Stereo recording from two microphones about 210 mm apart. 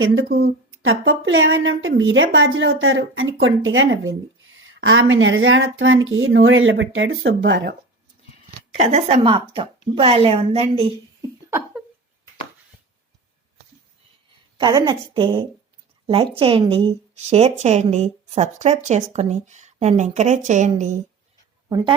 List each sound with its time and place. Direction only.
0.0 s speech: 65° right (ahead or behind)
0.3 s a woman's voice: 50° right (ahead or behind)
0.7 s speech: 70° right (ahead or behind)
8.8 s a woman's voice: 30° right (ahead or behind)
14.6 s a woman's voice: 20° right (ahead or behind)
21.7 s speech: 15° right (ahead or behind)